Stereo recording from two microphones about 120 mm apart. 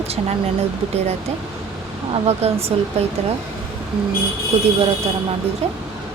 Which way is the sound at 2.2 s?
55° right (ahead or behind).